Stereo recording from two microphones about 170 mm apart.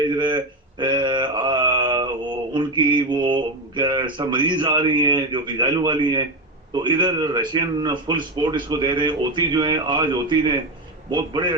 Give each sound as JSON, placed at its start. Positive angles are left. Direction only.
{"t": 0.2, "sound": "mantra", "side_deg": -25}
{"t": 6.7, "sound": "speech", "side_deg": -25}